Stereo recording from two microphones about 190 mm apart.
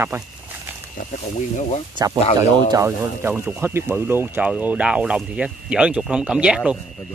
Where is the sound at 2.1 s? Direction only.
35° left (ahead or behind).